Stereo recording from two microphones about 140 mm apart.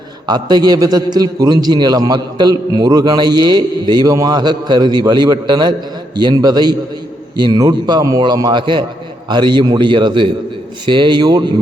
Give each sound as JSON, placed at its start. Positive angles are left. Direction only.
{"t": 0.3, "sound": "a man's voice", "side_deg": -30}